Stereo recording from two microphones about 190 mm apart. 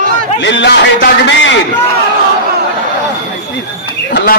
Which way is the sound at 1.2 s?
70° left (ahead or behind).